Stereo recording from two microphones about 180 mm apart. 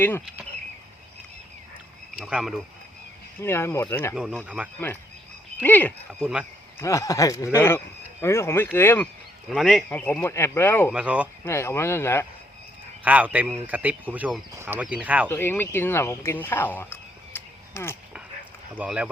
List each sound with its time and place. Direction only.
2.1 s speech: 5° right (ahead or behind)
3.4 s speech: 15° left (ahead or behind)
4.1 s speech: 5° right (ahead or behind)
5.6 s speech: 10° left (ahead or behind)
6.1 s speech: 5° right (ahead or behind)
6.7 s speech: 15° left (ahead or behind)
9.5 s speech: centre (ahead or behind)
9.9 s speech: 10° left (ahead or behind)
10.9 s speech: 5° right (ahead or behind)
11.4 s speech: 15° left (ahead or behind)
13.1 s speech: 10° right (ahead or behind)
15.3 s speech: 10° left (ahead or behind)
18.7 s speech: 5° right (ahead or behind)